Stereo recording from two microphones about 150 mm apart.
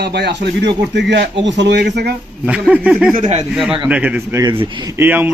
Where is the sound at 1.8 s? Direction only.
90° right.